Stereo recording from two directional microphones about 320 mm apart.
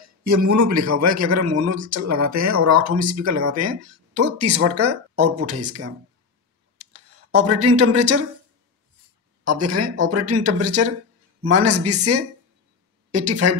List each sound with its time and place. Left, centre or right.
0.2 s a man's voice: right
6.8 s a sound: right
7.3 s speech: right
9.4 s speech: right